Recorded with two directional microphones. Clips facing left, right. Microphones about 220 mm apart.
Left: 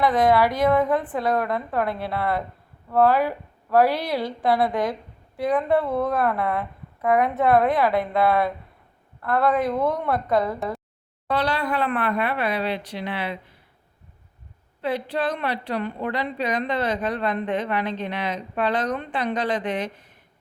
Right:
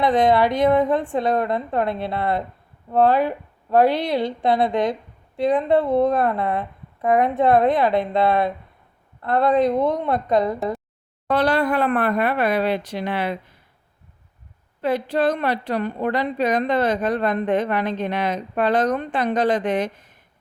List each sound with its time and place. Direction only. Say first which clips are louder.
0.0 s a woman's voice: right 2 dB; 25° right (ahead or behind)
11.3 s a woman's voice: right 5 dB; 50° right (ahead or behind)
14.8 s a woman's voice: right 5 dB; 45° right (ahead or behind)